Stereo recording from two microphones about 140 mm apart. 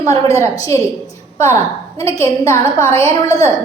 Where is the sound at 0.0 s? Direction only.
20° left (ahead or behind).